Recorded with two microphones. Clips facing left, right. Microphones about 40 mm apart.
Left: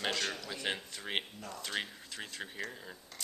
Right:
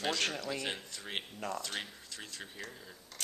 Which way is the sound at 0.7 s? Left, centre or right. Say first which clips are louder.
Left 3 dB; centre.